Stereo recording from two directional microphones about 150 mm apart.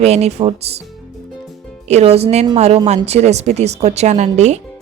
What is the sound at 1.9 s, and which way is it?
A woman's voice, 45° right (ahead or behind).